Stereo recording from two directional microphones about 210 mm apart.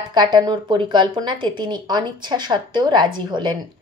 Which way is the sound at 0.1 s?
20° right (ahead or behind).